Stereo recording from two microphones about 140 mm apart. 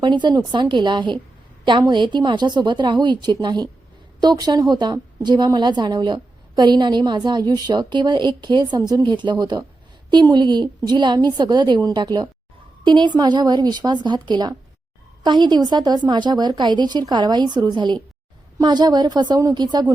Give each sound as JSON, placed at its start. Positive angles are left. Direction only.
{"t": 0.0, "sound": "a woman's voice", "side_deg": -35}